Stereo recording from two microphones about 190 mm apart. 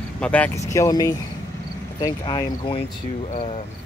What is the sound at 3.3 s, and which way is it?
Speech, 35° left (ahead or behind).